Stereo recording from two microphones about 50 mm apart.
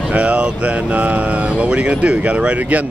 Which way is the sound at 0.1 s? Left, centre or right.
Right.